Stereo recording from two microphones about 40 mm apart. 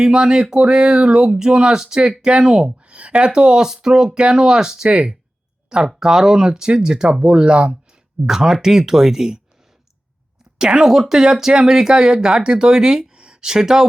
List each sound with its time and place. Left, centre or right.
0.0 s speech: centre
5.8 s speech: centre
8.3 s speech: centre
10.6 s speech: right